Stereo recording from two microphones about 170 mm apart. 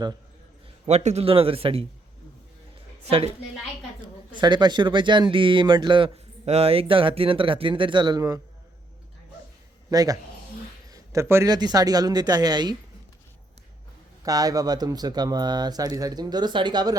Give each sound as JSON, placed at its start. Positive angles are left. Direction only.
{"t": 0.9, "sound": "speech", "side_deg": -40}
{"t": 4.4, "sound": "speech", "side_deg": -25}
{"t": 9.9, "sound": "speech", "side_deg": -20}
{"t": 14.3, "sound": "speech", "side_deg": -20}